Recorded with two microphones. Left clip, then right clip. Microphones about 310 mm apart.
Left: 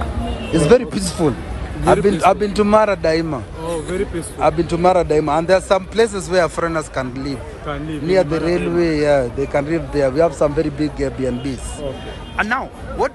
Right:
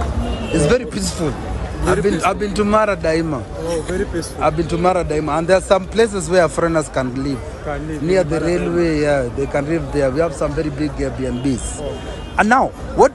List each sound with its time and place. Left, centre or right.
0.7 s a man's voice: centre
4.4 s a man's voice: centre